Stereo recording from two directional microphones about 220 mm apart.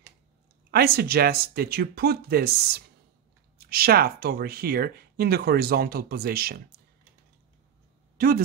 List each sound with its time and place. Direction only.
0.7 s speech: 45° right (ahead or behind)